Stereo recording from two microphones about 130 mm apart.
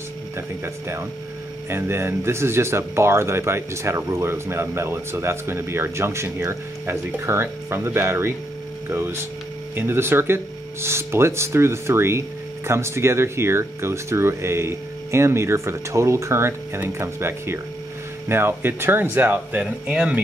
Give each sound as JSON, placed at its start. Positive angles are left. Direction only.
{"t": 1.7, "sound": "speech", "side_deg": -20}